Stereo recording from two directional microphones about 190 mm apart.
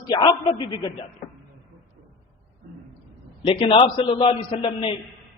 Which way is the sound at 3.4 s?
30° left (ahead or behind).